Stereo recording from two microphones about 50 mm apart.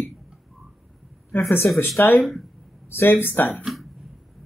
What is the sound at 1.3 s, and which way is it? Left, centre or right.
Speech, left.